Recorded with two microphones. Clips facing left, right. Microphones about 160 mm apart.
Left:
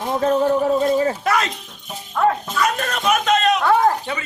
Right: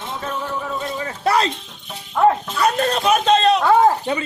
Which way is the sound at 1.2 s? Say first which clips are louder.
Right 2 dB; 30° right (ahead or behind).